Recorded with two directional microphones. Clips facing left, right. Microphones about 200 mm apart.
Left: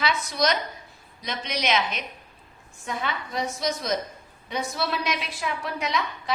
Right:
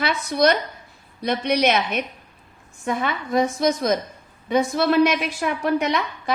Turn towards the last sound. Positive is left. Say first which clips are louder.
# right 5 dB
turn(degrees=-55)  # may be behind; listen again after turning